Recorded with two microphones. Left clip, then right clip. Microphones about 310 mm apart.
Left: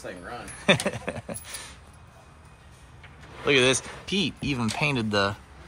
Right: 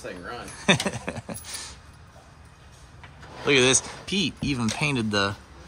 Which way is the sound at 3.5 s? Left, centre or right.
Centre.